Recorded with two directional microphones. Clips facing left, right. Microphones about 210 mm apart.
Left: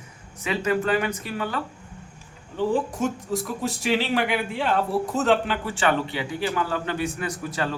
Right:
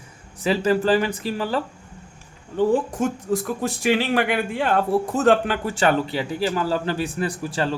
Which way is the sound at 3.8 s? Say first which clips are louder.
Right 3 dB; 50° right (ahead or behind).